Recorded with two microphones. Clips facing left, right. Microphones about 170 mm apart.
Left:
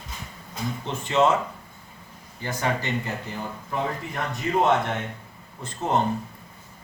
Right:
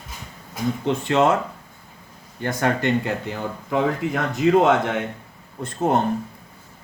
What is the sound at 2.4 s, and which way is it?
Speech, 60° right (ahead or behind).